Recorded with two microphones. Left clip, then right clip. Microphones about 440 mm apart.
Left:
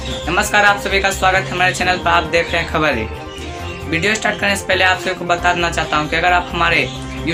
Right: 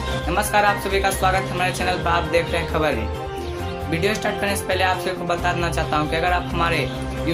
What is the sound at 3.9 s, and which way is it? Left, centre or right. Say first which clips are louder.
Speech: left 6 dB; right.